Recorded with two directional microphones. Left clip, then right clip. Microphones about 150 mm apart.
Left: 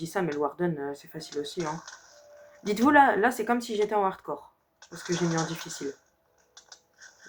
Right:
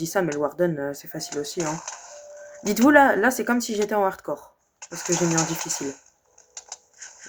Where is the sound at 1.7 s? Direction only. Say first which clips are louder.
Right 8 dB; 20° right (ahead or behind).